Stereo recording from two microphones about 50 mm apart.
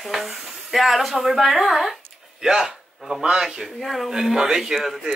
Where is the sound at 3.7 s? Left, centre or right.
Centre.